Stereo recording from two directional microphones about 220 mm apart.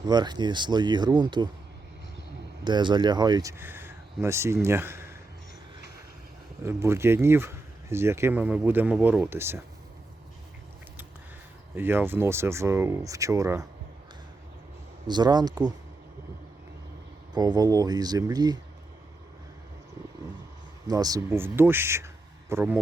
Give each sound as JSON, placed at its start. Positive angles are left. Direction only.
{"t": 0.0, "sound": "speech", "side_deg": -20}
{"t": 2.6, "sound": "speech", "side_deg": -20}
{"t": 6.7, "sound": "speech", "side_deg": -10}
{"t": 11.7, "sound": "speech", "side_deg": -10}
{"t": 15.0, "sound": "speech", "side_deg": -20}
{"t": 17.3, "sound": "speech", "side_deg": -20}
{"t": 20.8, "sound": "speech", "side_deg": -15}